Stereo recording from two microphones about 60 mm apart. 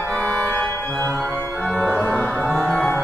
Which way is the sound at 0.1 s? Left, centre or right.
Left.